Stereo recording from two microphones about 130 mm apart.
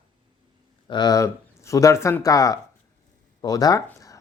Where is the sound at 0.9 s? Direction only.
30° left (ahead or behind).